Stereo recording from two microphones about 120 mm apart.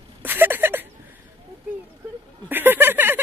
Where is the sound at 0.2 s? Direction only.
15° right (ahead or behind).